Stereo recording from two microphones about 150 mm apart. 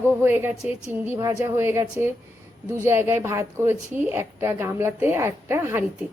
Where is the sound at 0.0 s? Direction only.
15° right (ahead or behind).